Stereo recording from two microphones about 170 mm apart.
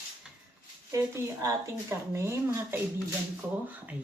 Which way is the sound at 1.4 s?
15° right (ahead or behind).